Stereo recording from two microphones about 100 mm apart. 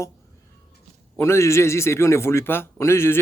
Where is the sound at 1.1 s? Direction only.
25° left (ahead or behind).